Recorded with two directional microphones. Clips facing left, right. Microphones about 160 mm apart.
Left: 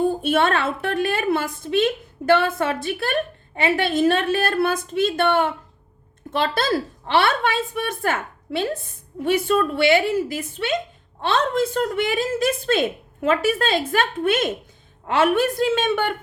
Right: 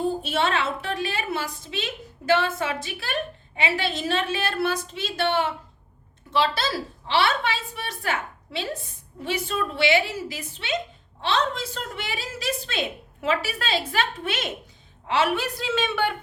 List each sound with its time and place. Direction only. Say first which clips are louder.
0.0 s a woman's voice: left 5 dB; 55° left (ahead or behind)